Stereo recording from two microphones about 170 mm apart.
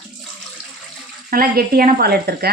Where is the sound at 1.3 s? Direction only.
60° right (ahead or behind).